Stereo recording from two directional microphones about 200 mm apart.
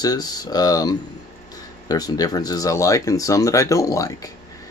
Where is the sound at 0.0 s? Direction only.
20° left (ahead or behind).